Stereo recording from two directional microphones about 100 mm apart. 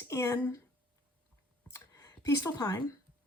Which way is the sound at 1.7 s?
35° left (ahead or behind).